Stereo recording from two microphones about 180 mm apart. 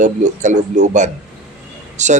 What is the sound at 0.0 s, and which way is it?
A man's voice, 45° right (ahead or behind).